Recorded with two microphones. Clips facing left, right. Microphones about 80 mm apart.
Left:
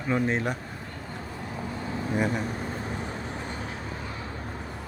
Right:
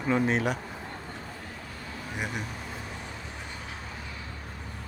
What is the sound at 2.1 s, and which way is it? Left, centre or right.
Speech, left.